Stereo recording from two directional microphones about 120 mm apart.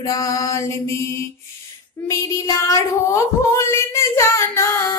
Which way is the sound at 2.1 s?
25° left (ahead or behind).